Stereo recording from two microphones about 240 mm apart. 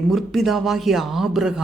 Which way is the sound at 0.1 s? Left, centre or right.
Centre.